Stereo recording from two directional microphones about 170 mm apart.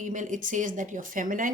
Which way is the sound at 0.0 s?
50° right (ahead or behind).